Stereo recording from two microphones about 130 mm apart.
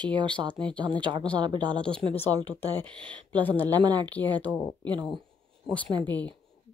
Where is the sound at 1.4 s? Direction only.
35° right (ahead or behind).